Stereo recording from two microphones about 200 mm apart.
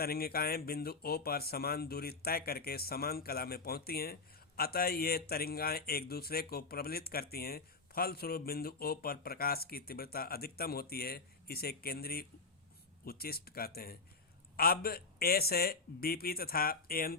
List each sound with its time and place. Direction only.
0.0 s speech: 50° left (ahead or behind)